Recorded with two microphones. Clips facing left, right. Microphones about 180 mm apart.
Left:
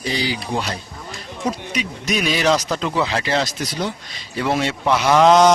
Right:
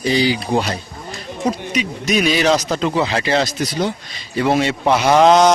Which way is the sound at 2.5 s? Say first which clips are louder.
Right 2 dB; 25° right (ahead or behind).